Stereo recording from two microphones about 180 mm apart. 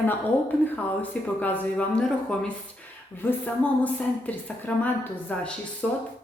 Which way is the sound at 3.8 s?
10° left (ahead or behind).